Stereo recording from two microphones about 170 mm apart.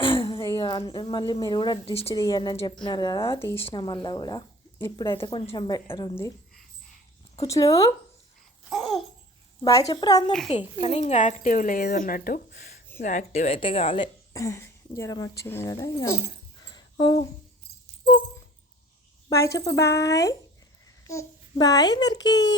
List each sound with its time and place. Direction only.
0.0 s a sound: 30° left (ahead or behind)
0.5 s a woman's voice: 30° left (ahead or behind)
2.1 s a woman's voice: 20° left (ahead or behind)
3.7 s a woman's voice: 25° left (ahead or behind)
5.1 s a woman's voice: 30° left (ahead or behind)
7.4 s a woman's voice: 20° left (ahead or behind)
8.7 s babbling: centre (ahead or behind)
9.6 s a woman's voice: 20° left (ahead or behind)
10.8 s a woman's voice: 35° left (ahead or behind)
11.0 s a woman's voice: 50° left (ahead or behind); by 12.8 s 70° left (ahead or behind)
13.0 s a woman's voice: 45° left (ahead or behind); by 14.1 s 30° left (ahead or behind)
14.3 s speech: 15° left (ahead or behind)
19.3 s a woman's voice: 20° left (ahead or behind)